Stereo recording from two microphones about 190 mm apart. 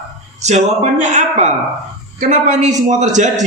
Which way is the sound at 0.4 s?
40° right (ahead or behind).